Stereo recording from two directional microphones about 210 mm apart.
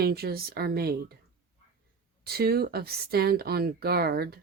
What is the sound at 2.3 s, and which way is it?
Speech, 50° right (ahead or behind).